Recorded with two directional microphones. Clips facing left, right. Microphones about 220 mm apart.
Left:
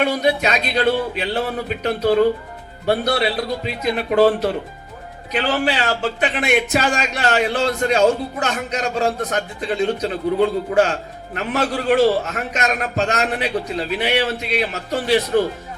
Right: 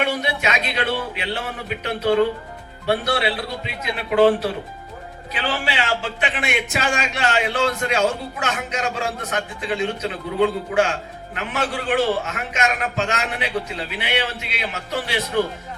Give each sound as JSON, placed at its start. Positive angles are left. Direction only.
{"t": 0.0, "sound": "a man's voice", "side_deg": 35}
{"t": 5.4, "sound": "a man's voice", "side_deg": 40}